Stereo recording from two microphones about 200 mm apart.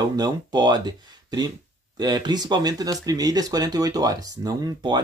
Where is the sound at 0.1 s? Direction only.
20° right (ahead or behind).